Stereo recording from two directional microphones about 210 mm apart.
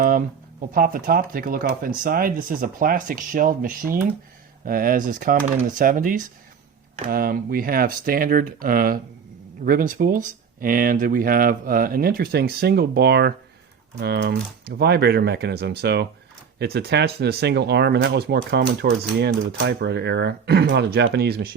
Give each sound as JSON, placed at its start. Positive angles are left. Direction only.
{"t": 0.7, "sound": "speech", "side_deg": -40}